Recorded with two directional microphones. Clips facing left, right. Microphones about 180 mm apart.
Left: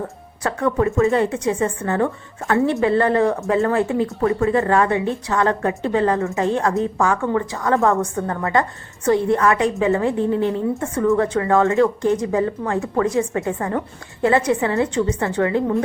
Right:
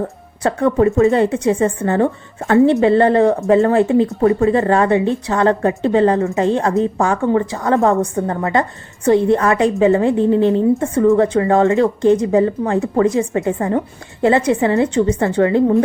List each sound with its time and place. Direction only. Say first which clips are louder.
0.4 s a woman's voice: right 5 dB; 30° right (ahead or behind)
0.9 s a woman's voice: right 5 dB; 20° right (ahead or behind)
1.1 s a woman's voice: right 4 dB; 30° right (ahead or behind)